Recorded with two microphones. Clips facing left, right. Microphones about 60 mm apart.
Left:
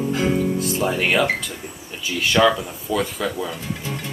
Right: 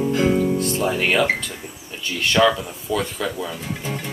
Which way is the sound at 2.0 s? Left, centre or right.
Centre.